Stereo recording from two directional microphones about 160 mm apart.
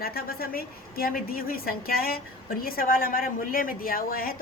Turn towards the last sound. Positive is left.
turn(degrees=65)  # may be behind; listen again after turning